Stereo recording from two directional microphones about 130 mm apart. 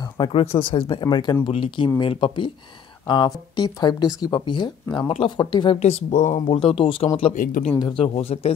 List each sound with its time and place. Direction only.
0.0 s speech: 40° left (ahead or behind)
5.8 s speech: 55° left (ahead or behind)
6.5 s speech: 45° left (ahead or behind)